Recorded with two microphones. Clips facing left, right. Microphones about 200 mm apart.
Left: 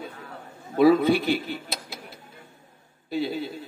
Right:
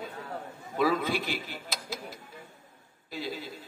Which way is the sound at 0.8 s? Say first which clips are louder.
Left 10 dB; 30° left (ahead or behind).